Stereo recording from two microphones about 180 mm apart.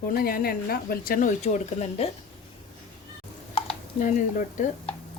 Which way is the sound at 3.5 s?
35° left (ahead or behind).